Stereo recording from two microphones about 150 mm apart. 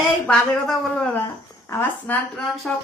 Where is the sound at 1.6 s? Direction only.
15° left (ahead or behind).